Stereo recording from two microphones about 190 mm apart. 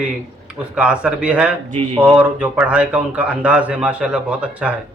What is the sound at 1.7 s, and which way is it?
Speech, 30° right (ahead or behind).